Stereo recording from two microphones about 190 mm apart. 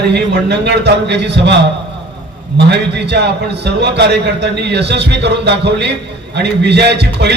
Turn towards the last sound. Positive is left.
turn(degrees=-60)  # may be behind; listen again after turning